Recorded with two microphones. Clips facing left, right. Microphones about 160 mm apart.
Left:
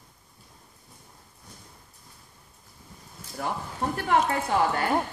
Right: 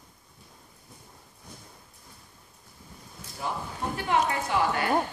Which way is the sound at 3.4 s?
55° left (ahead or behind).